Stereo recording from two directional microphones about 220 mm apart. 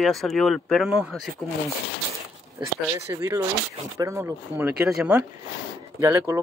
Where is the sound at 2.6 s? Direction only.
15° right (ahead or behind).